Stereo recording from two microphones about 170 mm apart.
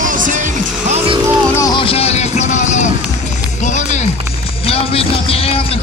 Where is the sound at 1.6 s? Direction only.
25° left (ahead or behind); by 2.9 s 45° left (ahead or behind).